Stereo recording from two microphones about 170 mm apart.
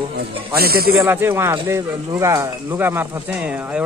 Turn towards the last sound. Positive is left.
turn(degrees=-15)  # may be behind; listen again after turning